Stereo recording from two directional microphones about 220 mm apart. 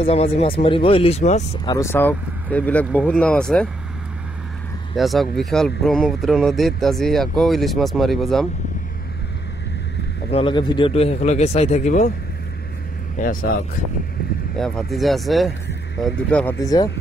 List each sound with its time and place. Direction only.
0.0 s speech: 25° left (ahead or behind)
1.7 s speech: 10° left (ahead or behind)
4.9 s speech: centre (ahead or behind)
10.3 s speech: 20° left (ahead or behind)
13.2 s speech: 40° left (ahead or behind)
14.6 s speech: centre (ahead or behind)
16.5 s speech: 15° left (ahead or behind)